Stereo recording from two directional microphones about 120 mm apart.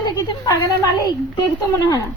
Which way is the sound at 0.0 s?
35° left (ahead or behind).